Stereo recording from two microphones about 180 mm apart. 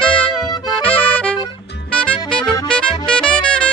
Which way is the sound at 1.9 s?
5° left (ahead or behind).